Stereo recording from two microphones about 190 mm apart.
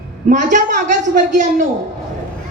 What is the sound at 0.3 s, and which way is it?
A woman's voice, 40° right (ahead or behind).